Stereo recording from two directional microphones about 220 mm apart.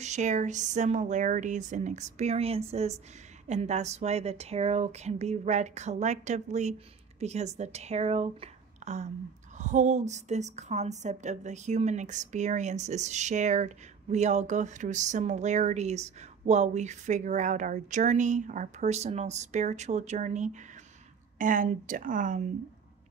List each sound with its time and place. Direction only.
0.0 s a woman's voice: 30° right (ahead or behind)